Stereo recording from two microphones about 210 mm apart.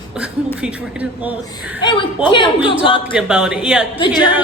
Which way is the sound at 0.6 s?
5° right (ahead or behind).